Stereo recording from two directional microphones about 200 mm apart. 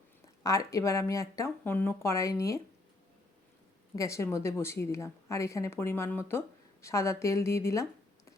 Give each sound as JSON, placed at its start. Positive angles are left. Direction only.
{"t": 0.4, "sound": "a woman's voice", "side_deg": 15}
{"t": 3.9, "sound": "a woman's voice", "side_deg": 15}